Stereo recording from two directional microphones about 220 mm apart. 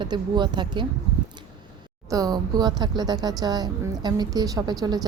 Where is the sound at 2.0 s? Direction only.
15° right (ahead or behind).